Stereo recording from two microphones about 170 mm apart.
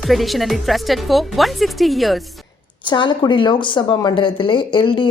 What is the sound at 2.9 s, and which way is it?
Speech, 30° left (ahead or behind).